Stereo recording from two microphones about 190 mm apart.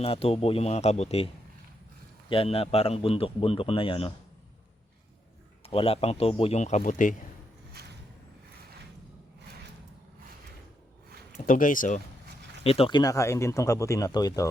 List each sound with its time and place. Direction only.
0.0 s speech: 30° left (ahead or behind)
2.3 s a man's voice: 30° left (ahead or behind)
5.6 s speech: 30° left (ahead or behind)
7.8 s vehicle: 55° right (ahead or behind)
11.4 s speech: 45° left (ahead or behind)
12.6 s speech: 30° left (ahead or behind)